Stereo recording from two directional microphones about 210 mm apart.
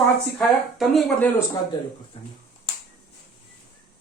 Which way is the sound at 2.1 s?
25° left (ahead or behind).